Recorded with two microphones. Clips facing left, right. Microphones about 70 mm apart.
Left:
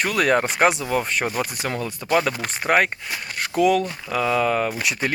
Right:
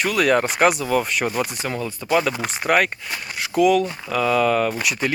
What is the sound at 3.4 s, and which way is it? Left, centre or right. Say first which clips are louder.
Speech: right 2 dB; left.